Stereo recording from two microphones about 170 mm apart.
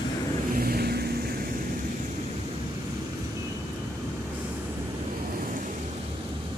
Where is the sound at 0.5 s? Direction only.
60° right (ahead or behind).